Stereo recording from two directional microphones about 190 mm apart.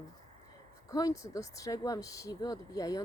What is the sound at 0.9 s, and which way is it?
Speech, 20° left (ahead or behind).